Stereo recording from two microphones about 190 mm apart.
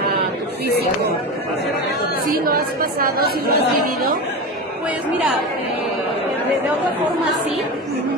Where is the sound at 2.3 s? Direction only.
50° right (ahead or behind).